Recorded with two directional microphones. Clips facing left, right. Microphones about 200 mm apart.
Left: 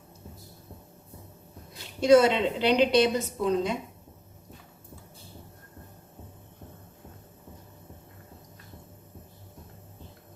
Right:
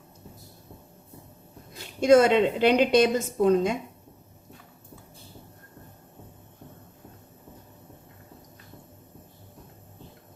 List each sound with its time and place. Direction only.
2.0 s a woman's voice: 50° right (ahead or behind)